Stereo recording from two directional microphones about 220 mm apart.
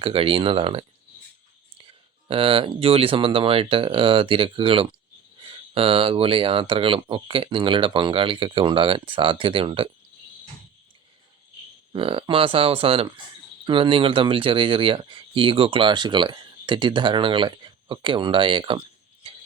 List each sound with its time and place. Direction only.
0.0 s speech: 25° right (ahead or behind)
11.9 s speech: 25° right (ahead or behind)